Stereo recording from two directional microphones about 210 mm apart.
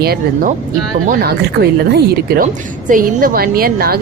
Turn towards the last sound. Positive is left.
turn(degrees=-45)  # may be behind; listen again after turning